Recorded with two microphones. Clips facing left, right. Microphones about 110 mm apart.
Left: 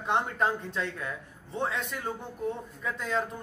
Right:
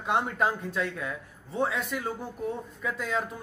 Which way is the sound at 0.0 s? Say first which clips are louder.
Right 1 dB; 10° right (ahead or behind).